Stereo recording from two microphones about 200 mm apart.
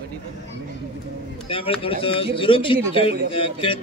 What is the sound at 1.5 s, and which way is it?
A man's voice, 30° left (ahead or behind).